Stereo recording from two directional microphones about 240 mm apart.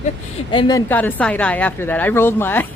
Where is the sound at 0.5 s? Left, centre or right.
Centre.